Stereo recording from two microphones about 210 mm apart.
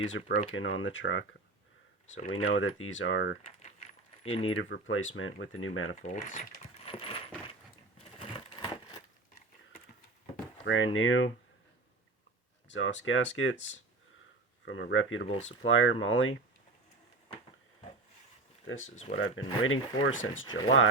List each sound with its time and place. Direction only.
0.0 s speech: 60° left (ahead or behind)
3.6 s keys jangling: 35° left (ahead or behind)
4.4 s speech: 70° left (ahead or behind)
6.0 s speech: 35° left (ahead or behind)
7.0 s coin: 25° left (ahead or behind)
10.7 s speech: 65° left (ahead or behind)
12.6 s speech: 60° left (ahead or behind)
14.6 s speech: 60° left (ahead or behind)
18.7 s speech: 70° left (ahead or behind)